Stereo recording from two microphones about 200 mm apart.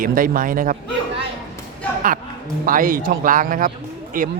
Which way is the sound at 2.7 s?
45° right (ahead or behind).